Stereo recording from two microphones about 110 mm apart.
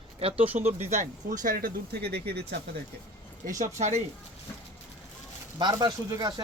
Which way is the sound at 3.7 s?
90° right.